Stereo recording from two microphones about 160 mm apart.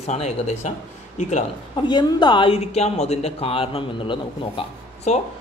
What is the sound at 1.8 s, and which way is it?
Speech, 30° left (ahead or behind).